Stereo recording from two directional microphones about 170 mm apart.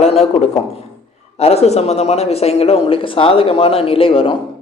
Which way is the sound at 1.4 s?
40° left (ahead or behind).